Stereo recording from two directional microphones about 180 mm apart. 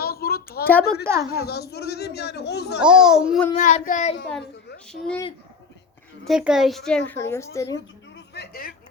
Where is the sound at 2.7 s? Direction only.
5° right (ahead or behind).